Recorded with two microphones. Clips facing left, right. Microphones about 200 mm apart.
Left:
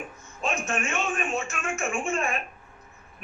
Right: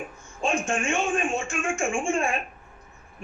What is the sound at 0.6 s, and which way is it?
Speech, 30° right (ahead or behind).